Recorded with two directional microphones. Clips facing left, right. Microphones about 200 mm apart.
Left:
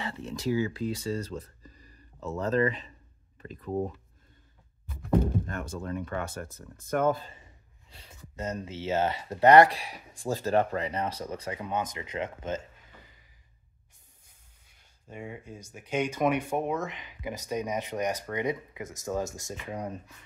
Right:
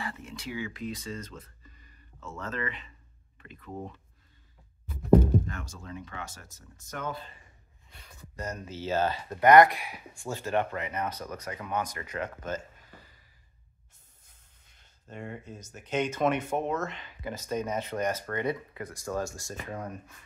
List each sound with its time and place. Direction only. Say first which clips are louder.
0.0 s speech: left 6 dB; 30° left (ahead or behind)
5.5 s speech: left 6 dB; 55° left (ahead or behind)
7.9 s speech: even; 25° left (ahead or behind)
14.2 s speech: even; 10° left (ahead or behind)